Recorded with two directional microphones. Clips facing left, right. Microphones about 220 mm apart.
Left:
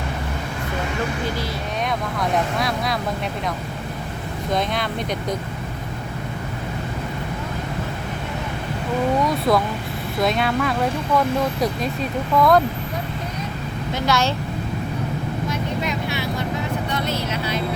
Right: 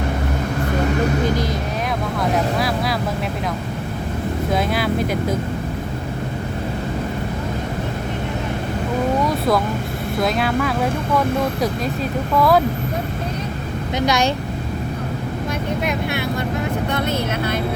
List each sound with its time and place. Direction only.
2.3 s speech: centre (ahead or behind)
4.5 s speech: 5° right (ahead or behind)
9.2 s speech: centre (ahead or behind)
12.4 s speech: 5° right (ahead or behind)
14.0 s speech: 15° right (ahead or behind)
15.8 s speech: 55° right (ahead or behind)